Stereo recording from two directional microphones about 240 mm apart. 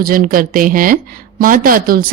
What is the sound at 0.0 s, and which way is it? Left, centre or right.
Speech, right.